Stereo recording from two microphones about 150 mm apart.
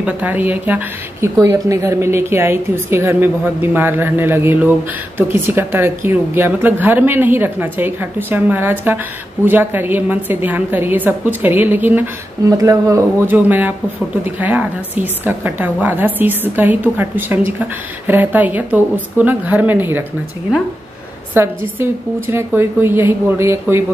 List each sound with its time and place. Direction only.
0.0 s a woman's voice: 10° right (ahead or behind)
1.4 s a woman's voice: 20° right (ahead or behind)
12.4 s a woman's voice: 20° right (ahead or behind)
21.3 s a woman's voice: 15° right (ahead or behind)